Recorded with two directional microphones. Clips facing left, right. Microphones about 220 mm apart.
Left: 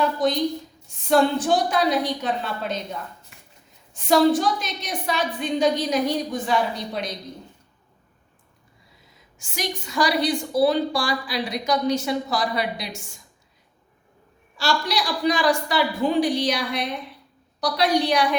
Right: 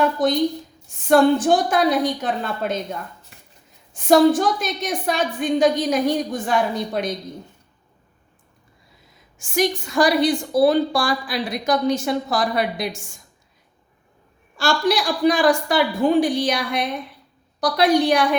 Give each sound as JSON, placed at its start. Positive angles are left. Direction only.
{"t": 1.0, "sound": "a woman's voice", "side_deg": -50}
{"t": 3.9, "sound": "a woman's voice", "side_deg": -50}
{"t": 9.4, "sound": "a woman's voice", "side_deg": -50}
{"t": 14.5, "sound": "a woman's voice", "side_deg": -50}